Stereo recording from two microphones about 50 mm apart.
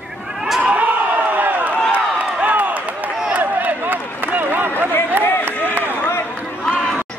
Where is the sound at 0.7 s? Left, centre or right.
Right.